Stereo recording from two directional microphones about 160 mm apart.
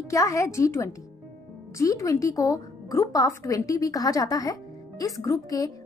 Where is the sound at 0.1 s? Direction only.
20° left (ahead or behind).